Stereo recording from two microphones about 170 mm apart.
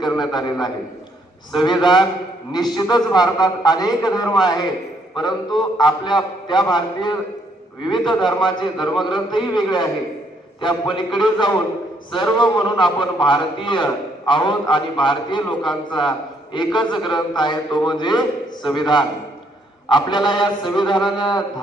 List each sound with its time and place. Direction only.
0.0 s a man's voice: 25° left (ahead or behind)
8.2 s a man's voice: 25° left (ahead or behind)